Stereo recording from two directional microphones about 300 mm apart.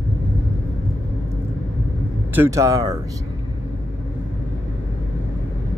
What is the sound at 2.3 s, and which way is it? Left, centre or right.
Speech, centre.